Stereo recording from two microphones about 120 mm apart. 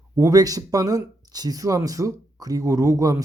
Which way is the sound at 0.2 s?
30° right (ahead or behind).